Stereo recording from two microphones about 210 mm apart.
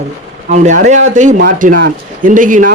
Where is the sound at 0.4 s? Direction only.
35° right (ahead or behind).